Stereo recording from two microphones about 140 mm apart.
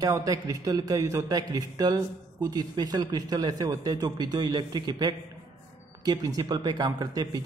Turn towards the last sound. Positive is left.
turn(degrees=-25)  # may be behind; listen again after turning